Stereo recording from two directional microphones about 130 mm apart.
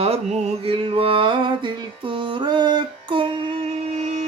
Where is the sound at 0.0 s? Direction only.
50° right (ahead or behind).